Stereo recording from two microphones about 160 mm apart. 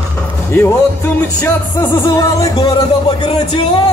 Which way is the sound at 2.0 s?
20° left (ahead or behind).